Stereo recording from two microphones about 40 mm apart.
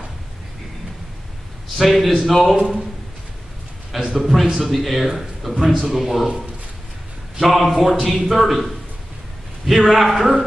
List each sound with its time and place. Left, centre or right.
1.8 s a man's voice: centre
2.5 s a man's voice: centre
3.9 s a man's voice: centre
7.3 s a man's voice: centre
9.8 s a man's voice: centre